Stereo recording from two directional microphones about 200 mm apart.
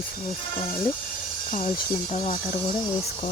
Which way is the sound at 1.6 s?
30° left (ahead or behind).